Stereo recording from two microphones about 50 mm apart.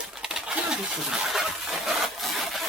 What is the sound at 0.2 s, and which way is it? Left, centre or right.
Bird, centre.